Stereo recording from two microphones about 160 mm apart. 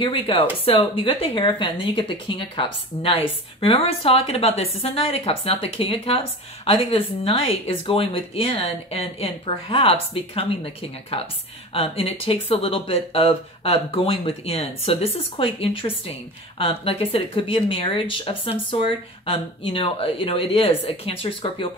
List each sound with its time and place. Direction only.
0.0 s speech: 35° left (ahead or behind)